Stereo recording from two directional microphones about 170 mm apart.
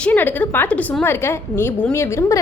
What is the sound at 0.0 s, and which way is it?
A woman's voice, 10° left (ahead or behind).